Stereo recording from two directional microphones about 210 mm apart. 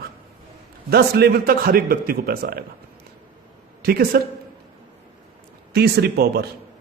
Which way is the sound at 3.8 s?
45° right (ahead or behind).